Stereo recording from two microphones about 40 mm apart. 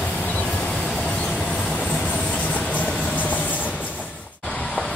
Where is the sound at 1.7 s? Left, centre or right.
Left.